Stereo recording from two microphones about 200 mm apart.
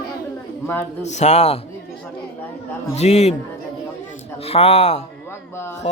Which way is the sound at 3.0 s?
35° left (ahead or behind).